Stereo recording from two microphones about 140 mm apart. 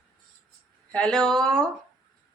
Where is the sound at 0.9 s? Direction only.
5° left (ahead or behind).